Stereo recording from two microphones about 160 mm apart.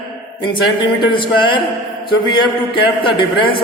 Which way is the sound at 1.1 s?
30° left (ahead or behind).